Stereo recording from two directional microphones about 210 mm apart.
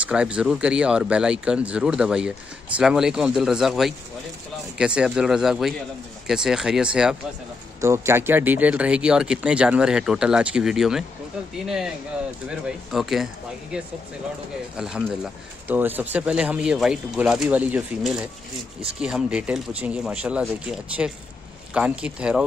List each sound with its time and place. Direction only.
0.0 s speech: 5° right (ahead or behind)